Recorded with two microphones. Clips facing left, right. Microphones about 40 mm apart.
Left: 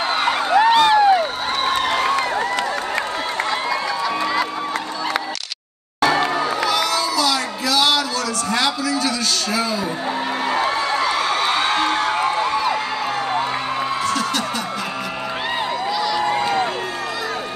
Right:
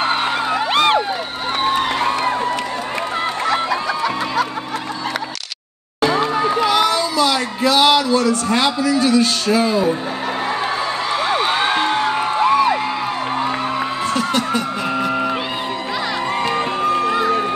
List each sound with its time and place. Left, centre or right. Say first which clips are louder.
0.7 s a sound: left 1 dB; right
5.9 s music: even; right
6.3 s crowd: right 3 dB; right
6.7 s a sound: right 3 dB; right
14.0 s music: right 2 dB; right
16.3 s crowd: even; right